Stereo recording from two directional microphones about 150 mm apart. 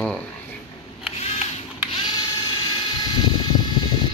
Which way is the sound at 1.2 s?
45° left (ahead or behind).